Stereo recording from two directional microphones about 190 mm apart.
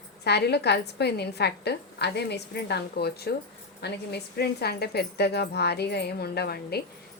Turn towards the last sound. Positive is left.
turn(degrees=55)  # may be behind; listen again after turning